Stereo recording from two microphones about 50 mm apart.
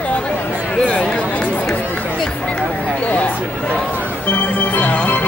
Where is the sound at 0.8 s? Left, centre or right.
Centre.